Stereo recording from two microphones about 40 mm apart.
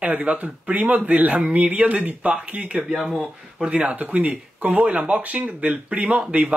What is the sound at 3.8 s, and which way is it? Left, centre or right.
Speech, right.